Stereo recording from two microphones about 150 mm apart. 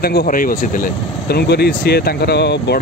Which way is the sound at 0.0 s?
90° left.